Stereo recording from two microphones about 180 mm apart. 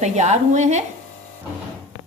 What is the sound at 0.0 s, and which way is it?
Speech, 40° right (ahead or behind).